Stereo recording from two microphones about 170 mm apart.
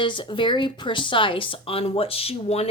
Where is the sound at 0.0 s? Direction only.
30° left (ahead or behind).